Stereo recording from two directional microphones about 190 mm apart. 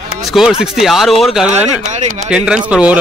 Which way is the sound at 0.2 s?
Centre (ahead or behind).